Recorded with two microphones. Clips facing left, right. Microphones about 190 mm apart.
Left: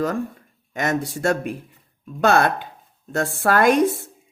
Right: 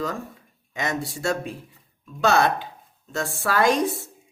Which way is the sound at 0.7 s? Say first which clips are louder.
Left 5 dB; 50° left (ahead or behind).